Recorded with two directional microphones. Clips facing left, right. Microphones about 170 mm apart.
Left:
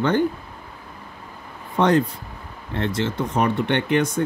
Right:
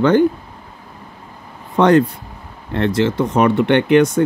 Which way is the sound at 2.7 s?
75° right (ahead or behind).